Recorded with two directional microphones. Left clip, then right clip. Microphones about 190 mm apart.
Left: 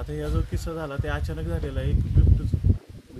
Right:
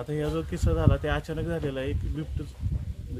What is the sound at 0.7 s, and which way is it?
Speech, 35° right (ahead or behind).